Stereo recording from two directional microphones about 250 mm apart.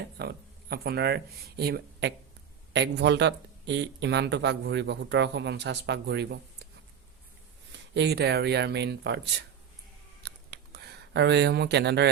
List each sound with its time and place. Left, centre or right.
0.2 s speech: right
7.7 s speech: right
10.2 s a sound: right